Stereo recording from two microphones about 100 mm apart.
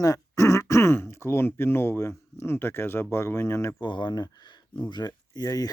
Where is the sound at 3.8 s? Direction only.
50° left (ahead or behind).